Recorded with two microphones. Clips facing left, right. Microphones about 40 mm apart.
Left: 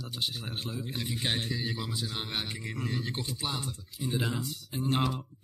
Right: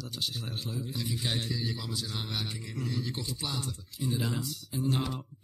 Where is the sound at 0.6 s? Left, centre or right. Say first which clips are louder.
Even; left.